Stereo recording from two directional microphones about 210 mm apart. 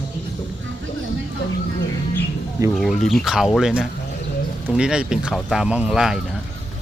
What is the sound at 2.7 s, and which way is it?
Speech, centre (ahead or behind).